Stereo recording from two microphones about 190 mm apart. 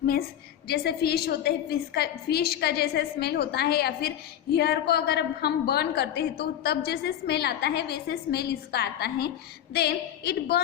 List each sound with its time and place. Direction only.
0.0 s a woman's voice: 55° left (ahead or behind)